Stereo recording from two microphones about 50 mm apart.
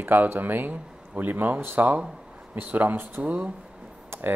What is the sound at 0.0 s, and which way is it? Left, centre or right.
Speech, right.